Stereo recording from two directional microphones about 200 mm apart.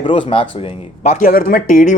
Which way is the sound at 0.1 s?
25° left (ahead or behind).